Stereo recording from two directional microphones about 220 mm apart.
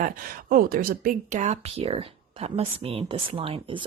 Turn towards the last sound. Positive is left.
turn(degrees=-25)  # may be behind; listen again after turning